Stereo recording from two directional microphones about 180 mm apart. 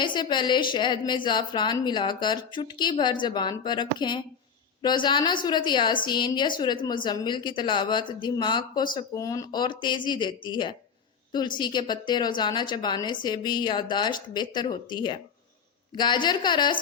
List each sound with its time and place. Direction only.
0.0 s a woman's voice: 25° left (ahead or behind)